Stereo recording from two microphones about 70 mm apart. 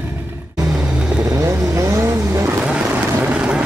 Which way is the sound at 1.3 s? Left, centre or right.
Right.